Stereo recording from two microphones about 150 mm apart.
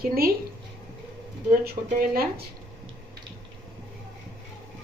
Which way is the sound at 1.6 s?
80° right.